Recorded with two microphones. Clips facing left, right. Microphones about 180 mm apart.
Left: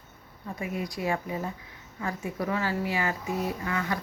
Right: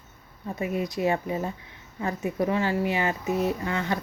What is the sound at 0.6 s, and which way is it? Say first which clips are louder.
Speech: right 6 dB; 25° right (ahead or behind).